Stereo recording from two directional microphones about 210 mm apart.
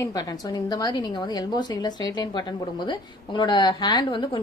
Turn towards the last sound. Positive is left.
turn(degrees=20)  # may be behind; listen again after turning